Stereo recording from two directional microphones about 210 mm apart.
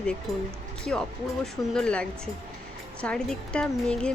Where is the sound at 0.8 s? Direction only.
5° left (ahead or behind).